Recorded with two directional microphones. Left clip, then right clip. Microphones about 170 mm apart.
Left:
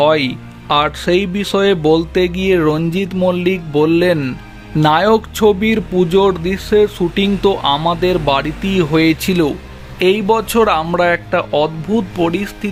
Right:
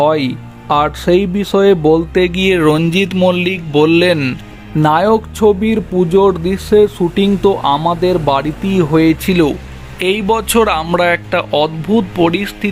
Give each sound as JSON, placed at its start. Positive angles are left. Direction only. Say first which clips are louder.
{"t": 0.0, "sound": "speech", "louder": "even", "side_deg": -20}
{"t": 2.2, "sound": "speech", "louder": "right 2 dB", "side_deg": -10}